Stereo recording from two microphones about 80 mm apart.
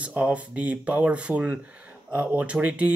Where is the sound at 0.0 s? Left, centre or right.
Centre.